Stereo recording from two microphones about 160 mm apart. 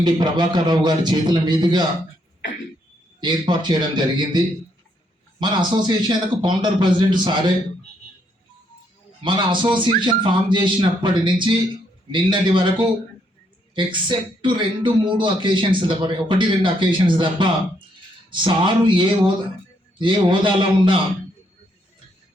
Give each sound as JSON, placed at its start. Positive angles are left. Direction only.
{"t": 0.0, "sound": "speech", "side_deg": -25}
{"t": 3.2, "sound": "speech", "side_deg": -25}
{"t": 9.2, "sound": "speech", "side_deg": -30}